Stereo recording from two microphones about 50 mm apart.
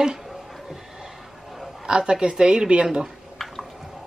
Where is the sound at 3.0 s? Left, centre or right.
Centre.